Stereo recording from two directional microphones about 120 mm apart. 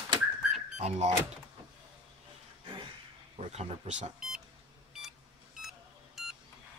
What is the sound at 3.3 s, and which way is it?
Speech, 65° right (ahead or behind).